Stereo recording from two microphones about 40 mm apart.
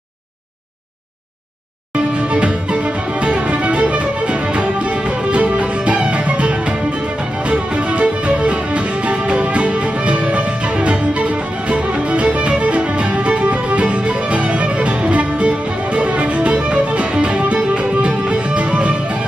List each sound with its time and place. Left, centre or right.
2.0 s music: right